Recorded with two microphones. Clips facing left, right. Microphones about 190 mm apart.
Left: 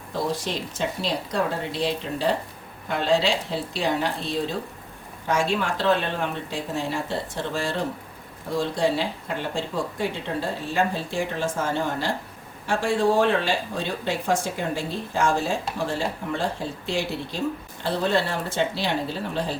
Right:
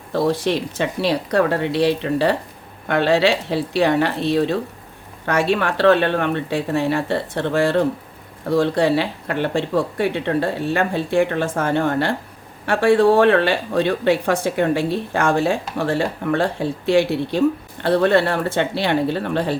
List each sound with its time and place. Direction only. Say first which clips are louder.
0.1 s a woman's voice: right 8 dB; 65° right (ahead or behind)